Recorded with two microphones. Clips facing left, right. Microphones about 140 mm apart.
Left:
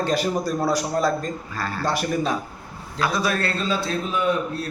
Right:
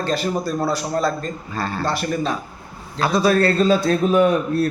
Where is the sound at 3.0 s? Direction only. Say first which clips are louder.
Right 6 dB; 30° right (ahead or behind).